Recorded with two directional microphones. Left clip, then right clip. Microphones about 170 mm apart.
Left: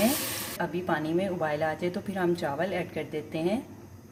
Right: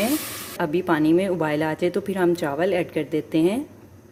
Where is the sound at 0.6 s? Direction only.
55° right (ahead or behind).